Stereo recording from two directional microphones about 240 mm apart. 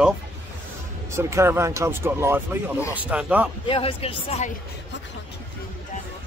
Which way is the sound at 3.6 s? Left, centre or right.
Left.